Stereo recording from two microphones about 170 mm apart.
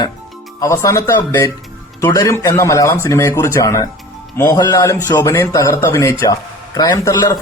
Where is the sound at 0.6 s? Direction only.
20° left (ahead or behind).